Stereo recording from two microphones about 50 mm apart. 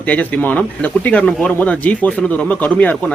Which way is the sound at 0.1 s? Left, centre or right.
Left.